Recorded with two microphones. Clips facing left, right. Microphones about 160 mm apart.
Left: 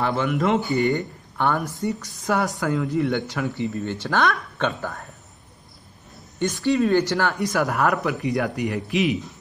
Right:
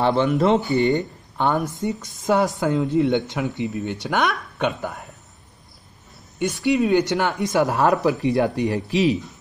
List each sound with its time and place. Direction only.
0.0 s speech: 30° right (ahead or behind)
0.7 s speech: 20° right (ahead or behind)
6.4 s speech: 15° right (ahead or behind); by 9.1 s 30° right (ahead or behind)